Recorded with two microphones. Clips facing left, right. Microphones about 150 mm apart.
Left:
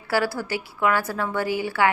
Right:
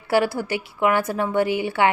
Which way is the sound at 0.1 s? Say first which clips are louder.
Right 4 dB; 20° right (ahead or behind).